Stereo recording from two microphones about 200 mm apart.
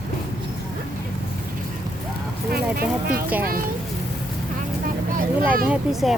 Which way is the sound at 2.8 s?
50° right (ahead or behind).